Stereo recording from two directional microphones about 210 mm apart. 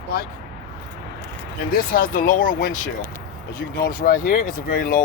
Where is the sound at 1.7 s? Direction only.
40° left (ahead or behind).